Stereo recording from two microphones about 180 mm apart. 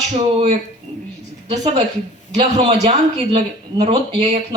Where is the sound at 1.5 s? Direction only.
35° right (ahead or behind).